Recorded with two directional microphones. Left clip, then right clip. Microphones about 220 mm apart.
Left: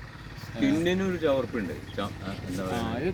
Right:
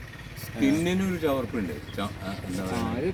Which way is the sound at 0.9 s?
45° right (ahead or behind).